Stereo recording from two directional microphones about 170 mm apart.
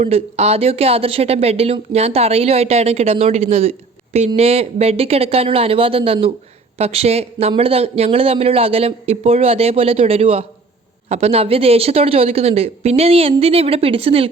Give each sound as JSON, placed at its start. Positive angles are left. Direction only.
{"t": 0.0, "sound": "speech", "side_deg": -40}